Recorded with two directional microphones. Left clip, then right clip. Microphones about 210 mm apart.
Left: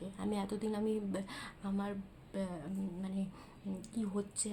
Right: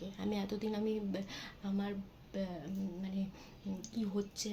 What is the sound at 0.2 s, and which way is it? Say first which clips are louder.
A woman's voice: left 1 dB; 5° left (ahead or behind).